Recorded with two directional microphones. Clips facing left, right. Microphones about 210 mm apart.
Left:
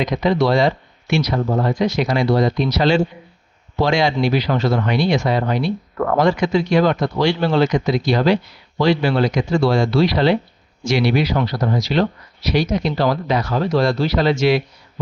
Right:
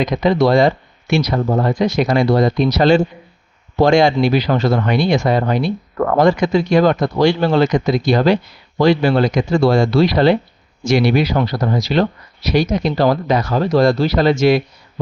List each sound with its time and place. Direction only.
0.0 s speech: 45° right (ahead or behind)